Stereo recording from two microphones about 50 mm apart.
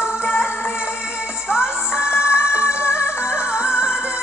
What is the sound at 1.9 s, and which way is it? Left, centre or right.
Music, left.